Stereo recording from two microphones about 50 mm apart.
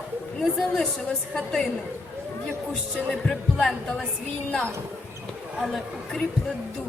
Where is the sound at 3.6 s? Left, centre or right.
Centre.